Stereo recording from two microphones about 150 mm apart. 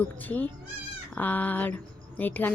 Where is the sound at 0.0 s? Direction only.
10° left (ahead or behind).